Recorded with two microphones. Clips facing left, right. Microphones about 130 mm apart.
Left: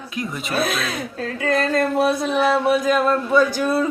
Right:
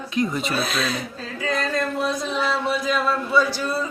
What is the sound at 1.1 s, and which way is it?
Speech, 60° left (ahead or behind).